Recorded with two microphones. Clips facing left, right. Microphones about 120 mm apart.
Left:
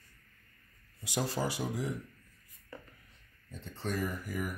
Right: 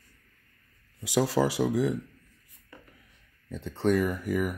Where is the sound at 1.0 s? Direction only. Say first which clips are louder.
Right 9 dB; 90° right.